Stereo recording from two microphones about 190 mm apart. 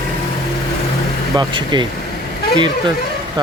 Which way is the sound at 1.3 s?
25° right (ahead or behind).